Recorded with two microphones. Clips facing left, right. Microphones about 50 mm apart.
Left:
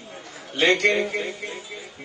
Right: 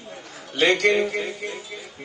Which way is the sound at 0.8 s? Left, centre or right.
Left.